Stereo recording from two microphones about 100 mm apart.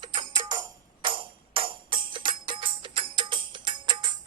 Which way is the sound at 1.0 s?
60° right (ahead or behind).